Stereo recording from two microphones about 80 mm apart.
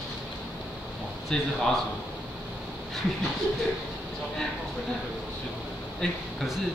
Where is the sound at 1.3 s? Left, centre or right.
Centre.